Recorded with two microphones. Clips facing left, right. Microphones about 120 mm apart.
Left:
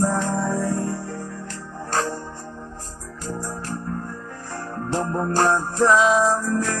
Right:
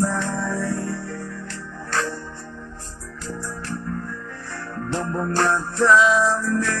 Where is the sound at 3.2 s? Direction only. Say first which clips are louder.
Left 1 dB; 40° left (ahead or behind).